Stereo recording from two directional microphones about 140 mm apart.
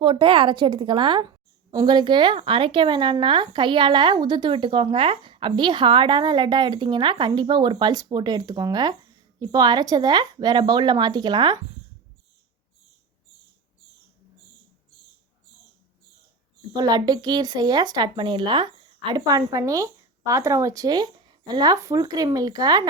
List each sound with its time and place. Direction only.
0.0 s speech: 40° right (ahead or behind)
16.7 s speech: 30° right (ahead or behind)